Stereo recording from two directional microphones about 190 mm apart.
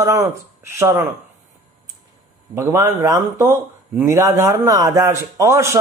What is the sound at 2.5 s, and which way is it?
Speech, 20° right (ahead or behind).